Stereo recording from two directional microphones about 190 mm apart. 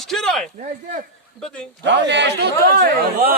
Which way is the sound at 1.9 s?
65° right (ahead or behind).